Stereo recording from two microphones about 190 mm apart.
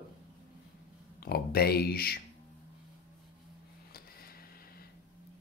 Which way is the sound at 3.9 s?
50° left (ahead or behind).